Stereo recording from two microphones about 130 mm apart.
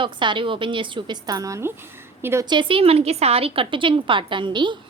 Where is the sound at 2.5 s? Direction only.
40° right (ahead or behind).